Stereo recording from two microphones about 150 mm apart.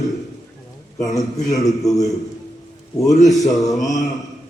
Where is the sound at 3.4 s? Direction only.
25° left (ahead or behind).